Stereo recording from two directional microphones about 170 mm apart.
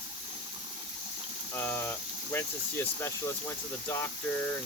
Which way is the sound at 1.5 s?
10° left (ahead or behind).